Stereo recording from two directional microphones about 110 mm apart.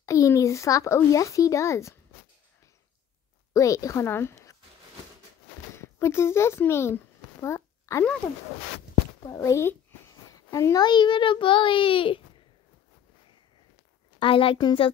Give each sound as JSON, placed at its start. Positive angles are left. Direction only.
{"t": 0.0, "sound": "speech", "side_deg": 30}
{"t": 3.5, "sound": "speech", "side_deg": 30}
{"t": 5.8, "sound": "a child's voice", "side_deg": 25}
{"t": 7.3, "sound": "a sound", "side_deg": 25}
{"t": 9.3, "sound": "a child's voice", "side_deg": 30}
{"t": 14.2, "sound": "a woman's voice", "side_deg": 55}